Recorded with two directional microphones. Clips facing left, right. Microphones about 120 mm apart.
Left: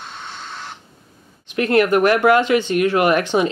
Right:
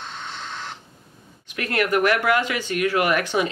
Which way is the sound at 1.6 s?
25° left (ahead or behind).